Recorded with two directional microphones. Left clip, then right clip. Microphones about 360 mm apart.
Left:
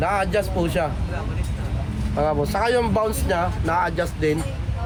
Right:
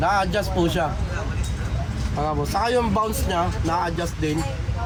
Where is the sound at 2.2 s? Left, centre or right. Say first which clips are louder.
Left 2 dB; centre.